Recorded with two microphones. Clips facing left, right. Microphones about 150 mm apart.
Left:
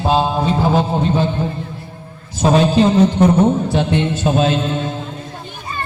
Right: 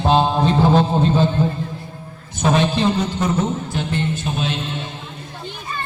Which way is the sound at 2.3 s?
35° left (ahead or behind).